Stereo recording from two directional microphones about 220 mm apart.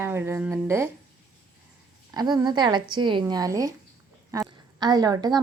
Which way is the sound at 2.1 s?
20° right (ahead or behind).